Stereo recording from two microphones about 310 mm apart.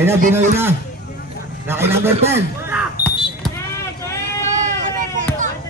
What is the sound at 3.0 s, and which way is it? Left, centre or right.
Smoke detector, centre.